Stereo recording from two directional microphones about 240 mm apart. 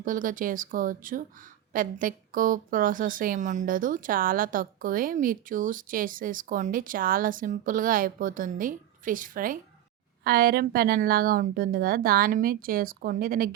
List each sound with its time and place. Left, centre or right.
0.0 s speech: right